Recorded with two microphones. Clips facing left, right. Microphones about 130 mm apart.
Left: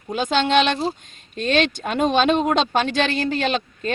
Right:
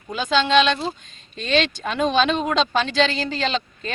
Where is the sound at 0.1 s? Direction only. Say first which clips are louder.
Even; 50° left (ahead or behind).